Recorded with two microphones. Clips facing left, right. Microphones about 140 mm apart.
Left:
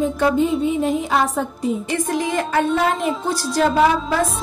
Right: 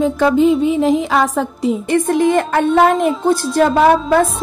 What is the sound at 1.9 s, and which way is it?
Speech, 55° right (ahead or behind).